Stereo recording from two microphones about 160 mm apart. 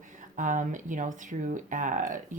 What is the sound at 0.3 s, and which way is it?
Speech, 50° right (ahead or behind).